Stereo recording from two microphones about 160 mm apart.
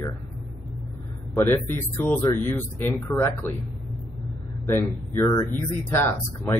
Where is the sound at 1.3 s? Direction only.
15° left (ahead or behind).